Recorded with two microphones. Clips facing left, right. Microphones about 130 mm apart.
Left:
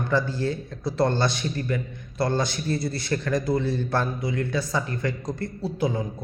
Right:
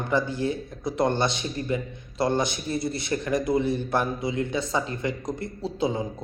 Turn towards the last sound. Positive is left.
turn(degrees=-20)  # may be behind; listen again after turning